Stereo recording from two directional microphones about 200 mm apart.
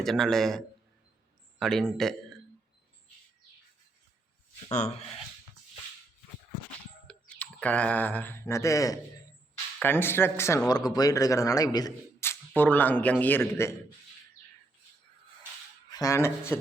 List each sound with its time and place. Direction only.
0.0 s a man's voice: centre (ahead or behind)
4.7 s speech: 35° left (ahead or behind)
7.1 s speech: 5° left (ahead or behind)
15.9 s speech: 15° left (ahead or behind)